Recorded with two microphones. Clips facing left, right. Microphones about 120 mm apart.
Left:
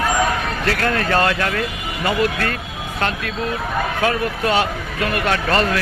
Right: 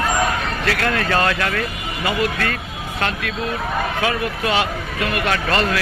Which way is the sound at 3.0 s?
35° left (ahead or behind).